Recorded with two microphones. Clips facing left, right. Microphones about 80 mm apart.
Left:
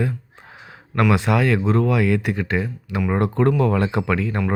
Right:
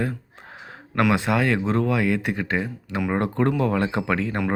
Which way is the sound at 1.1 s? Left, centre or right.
Right.